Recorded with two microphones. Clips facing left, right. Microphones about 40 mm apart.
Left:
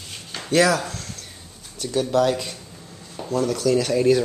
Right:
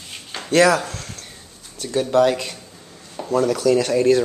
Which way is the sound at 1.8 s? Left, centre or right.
Centre.